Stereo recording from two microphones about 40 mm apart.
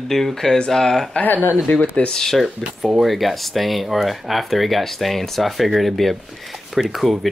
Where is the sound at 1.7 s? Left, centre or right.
Left.